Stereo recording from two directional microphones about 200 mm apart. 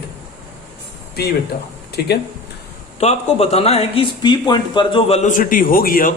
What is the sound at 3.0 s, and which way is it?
A man's voice, 30° left (ahead or behind).